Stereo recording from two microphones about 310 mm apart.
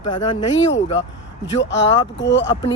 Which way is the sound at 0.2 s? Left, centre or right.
Centre.